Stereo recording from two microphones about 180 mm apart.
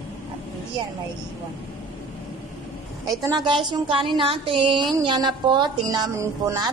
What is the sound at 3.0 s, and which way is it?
A woman's voice, 20° right (ahead or behind).